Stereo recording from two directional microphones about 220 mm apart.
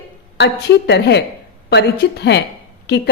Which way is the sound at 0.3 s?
50° left (ahead or behind).